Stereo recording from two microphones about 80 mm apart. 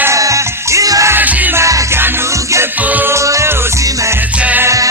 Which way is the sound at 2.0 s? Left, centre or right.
Right.